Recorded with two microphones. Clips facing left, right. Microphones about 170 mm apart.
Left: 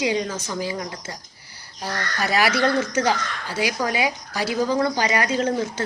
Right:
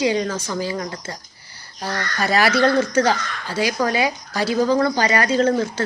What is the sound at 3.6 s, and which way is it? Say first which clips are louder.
Speech: right 3 dB; 15° left (ahead or behind).